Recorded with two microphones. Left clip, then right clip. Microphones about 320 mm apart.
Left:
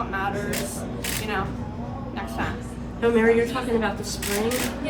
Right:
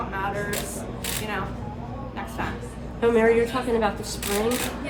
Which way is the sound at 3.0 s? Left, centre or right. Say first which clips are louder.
Even; right.